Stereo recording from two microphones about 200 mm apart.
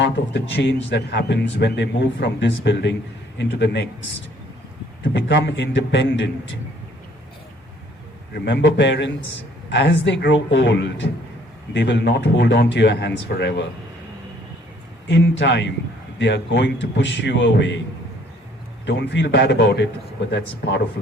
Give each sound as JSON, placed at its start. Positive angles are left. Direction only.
{"t": 0.0, "sound": "a man's voice", "side_deg": 60}
{"t": 5.0, "sound": "a man's voice", "side_deg": 60}
{"t": 8.3, "sound": "a man's voice", "side_deg": 60}
{"t": 15.0, "sound": "a man's voice", "side_deg": 65}
{"t": 18.9, "sound": "a man's voice", "side_deg": 60}